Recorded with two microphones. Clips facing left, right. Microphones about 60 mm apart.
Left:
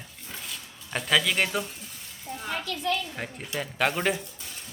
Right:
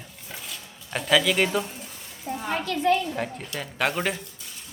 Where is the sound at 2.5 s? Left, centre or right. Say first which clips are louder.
Right 6 dB; right.